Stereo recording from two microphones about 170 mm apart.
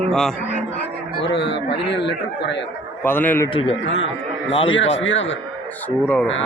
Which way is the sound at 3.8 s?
90° left.